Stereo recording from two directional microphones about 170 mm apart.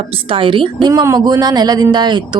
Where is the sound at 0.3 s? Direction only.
30° right (ahead or behind).